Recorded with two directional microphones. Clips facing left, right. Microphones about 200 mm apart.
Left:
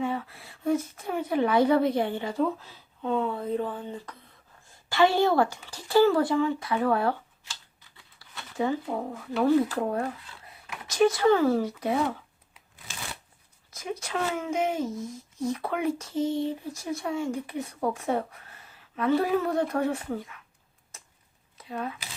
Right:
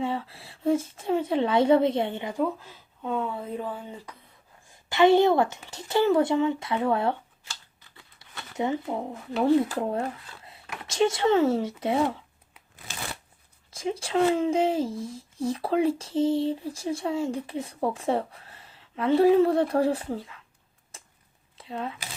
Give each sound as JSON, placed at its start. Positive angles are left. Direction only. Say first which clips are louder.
{"t": 0.0, "sound": "speech", "louder": "right 1 dB", "side_deg": -30}
{"t": 3.0, "sound": "speech", "louder": "left 2 dB", "side_deg": -5}
{"t": 4.7, "sound": "speech", "louder": "right 4 dB", "side_deg": -20}
{"t": 8.2, "sound": "speech", "louder": "even", "side_deg": -20}
{"t": 13.7, "sound": "speech", "louder": "right 4 dB", "side_deg": -30}
{"t": 21.6, "sound": "speech", "louder": "even", "side_deg": -25}